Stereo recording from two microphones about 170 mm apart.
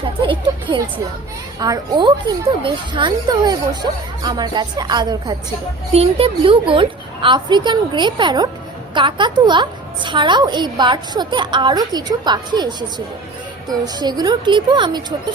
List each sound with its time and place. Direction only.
0.2 s a woman's voice: 30° right (ahead or behind)
5.9 s a woman's voice: 35° right (ahead or behind)